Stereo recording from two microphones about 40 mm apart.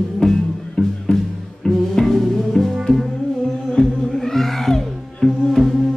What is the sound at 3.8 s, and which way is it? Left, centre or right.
Music, left.